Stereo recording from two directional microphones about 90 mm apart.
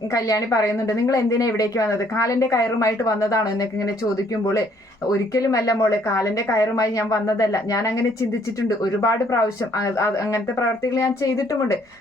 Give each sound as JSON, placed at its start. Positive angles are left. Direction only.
{"t": 0.1, "sound": "a woman's voice", "side_deg": 40}
{"t": 5.3, "sound": "a woman's voice", "side_deg": 40}